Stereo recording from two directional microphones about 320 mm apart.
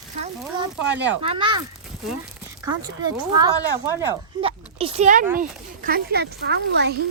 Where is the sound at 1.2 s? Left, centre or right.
Centre.